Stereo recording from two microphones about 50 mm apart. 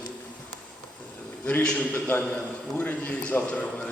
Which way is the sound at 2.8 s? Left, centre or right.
Left.